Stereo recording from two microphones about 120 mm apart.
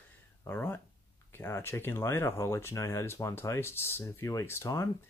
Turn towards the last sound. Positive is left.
turn(degrees=25)  # may be behind; listen again after turning